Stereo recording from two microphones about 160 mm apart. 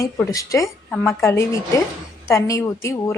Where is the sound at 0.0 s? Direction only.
20° left (ahead or behind).